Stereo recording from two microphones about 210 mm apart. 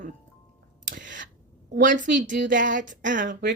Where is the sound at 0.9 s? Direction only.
60° right (ahead or behind).